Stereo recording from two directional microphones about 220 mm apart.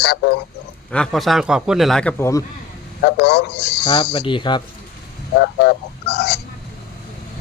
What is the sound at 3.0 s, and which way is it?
Speech, 50° left (ahead or behind).